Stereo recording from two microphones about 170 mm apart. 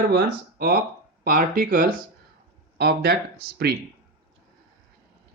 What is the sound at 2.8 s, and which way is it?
Speech, 70° right (ahead or behind).